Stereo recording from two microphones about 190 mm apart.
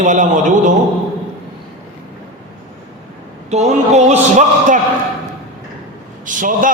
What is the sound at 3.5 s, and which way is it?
A man's voice, 35° right (ahead or behind).